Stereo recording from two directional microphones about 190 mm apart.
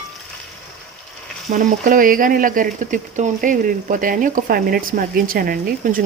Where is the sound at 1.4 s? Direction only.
40° right (ahead or behind).